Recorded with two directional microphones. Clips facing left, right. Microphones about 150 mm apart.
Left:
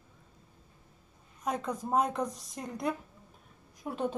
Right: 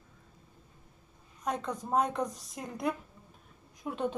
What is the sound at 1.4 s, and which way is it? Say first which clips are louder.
A woman's voice: left 1 dB; centre (ahead or behind).